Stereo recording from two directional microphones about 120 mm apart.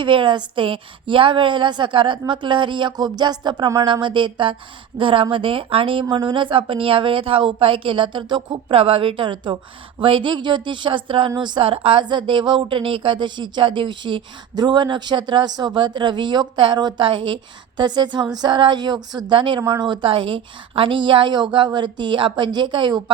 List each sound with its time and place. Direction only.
0.0 s a woman's voice: 45° right (ahead or behind)